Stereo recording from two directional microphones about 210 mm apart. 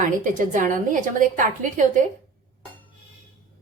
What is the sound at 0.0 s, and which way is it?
A woman's voice, 40° right (ahead or behind).